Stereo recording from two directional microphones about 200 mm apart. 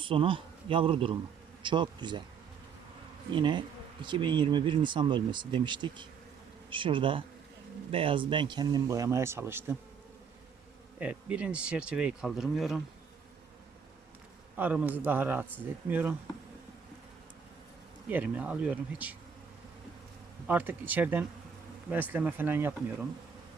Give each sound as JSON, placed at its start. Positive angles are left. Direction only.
{"t": 0.0, "sound": "speech", "side_deg": -25}
{"t": 3.3, "sound": "speech", "side_deg": -25}
{"t": 11.0, "sound": "speech", "side_deg": -5}
{"t": 14.5, "sound": "speech", "side_deg": -10}
{"t": 18.1, "sound": "speech", "side_deg": -5}
{"t": 20.5, "sound": "speech", "side_deg": -10}